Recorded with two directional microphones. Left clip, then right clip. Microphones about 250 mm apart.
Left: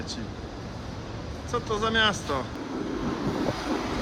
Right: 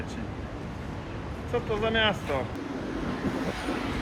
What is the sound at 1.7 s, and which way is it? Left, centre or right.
Speech, centre.